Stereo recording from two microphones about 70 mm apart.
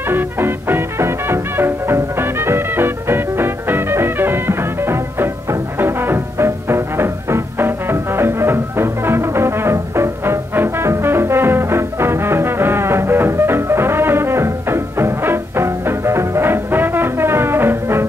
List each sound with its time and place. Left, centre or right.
0.0 s music: right